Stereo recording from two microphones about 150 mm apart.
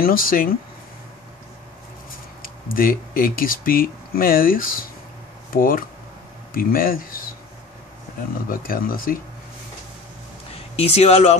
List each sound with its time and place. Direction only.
0.0 s speech: 75° left (ahead or behind)
2.0 s speech: 70° left (ahead or behind)
8.5 s speech: 75° left (ahead or behind)
10.5 s speech: 40° left (ahead or behind)